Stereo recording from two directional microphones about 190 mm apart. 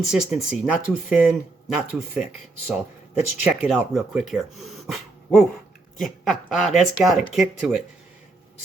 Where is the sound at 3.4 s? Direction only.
5° right (ahead or behind).